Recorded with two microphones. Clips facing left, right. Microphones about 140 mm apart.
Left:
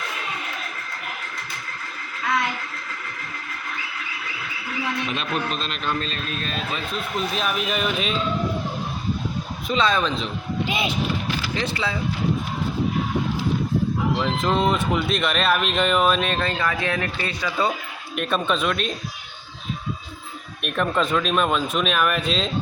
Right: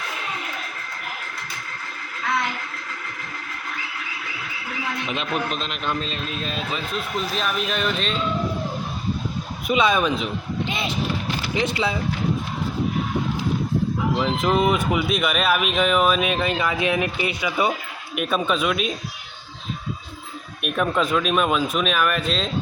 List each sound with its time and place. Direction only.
5.0 s speech: 20° right (ahead or behind)
7.2 s speech: centre (ahead or behind)
9.6 s speech: 15° right (ahead or behind)
10.7 s vehicle: 5° left (ahead or behind)
11.5 s speech: 20° right (ahead or behind)
14.2 s speech: 10° right (ahead or behind)
20.6 s speech: 5° right (ahead or behind)